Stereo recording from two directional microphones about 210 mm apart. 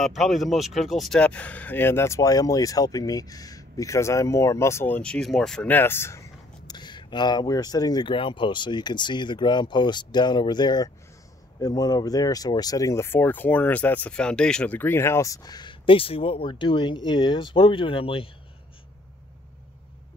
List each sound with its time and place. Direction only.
0.0 s speech: centre (ahead or behind); by 18.3 s 25° left (ahead or behind)